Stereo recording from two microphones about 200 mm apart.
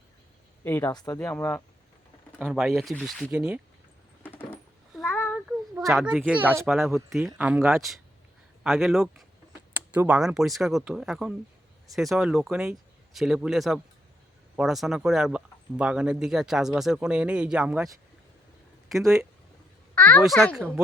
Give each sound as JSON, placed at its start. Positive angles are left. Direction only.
{"t": 0.6, "sound": "speech", "side_deg": 10}
{"t": 2.4, "sound": "speech", "side_deg": -5}
{"t": 4.2, "sound": "coin", "side_deg": 10}
{"t": 5.9, "sound": "speech", "side_deg": 0}
{"t": 18.9, "sound": "speech", "side_deg": -15}
{"t": 20.0, "sound": "speech", "side_deg": 10}